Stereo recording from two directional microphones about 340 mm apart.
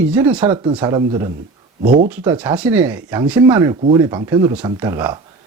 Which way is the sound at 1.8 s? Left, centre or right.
Right.